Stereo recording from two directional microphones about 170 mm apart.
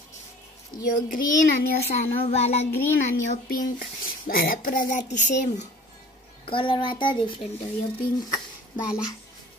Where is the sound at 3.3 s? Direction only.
50° left (ahead or behind).